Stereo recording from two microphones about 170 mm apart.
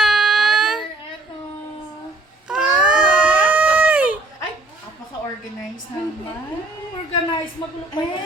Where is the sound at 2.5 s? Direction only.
5° right (ahead or behind).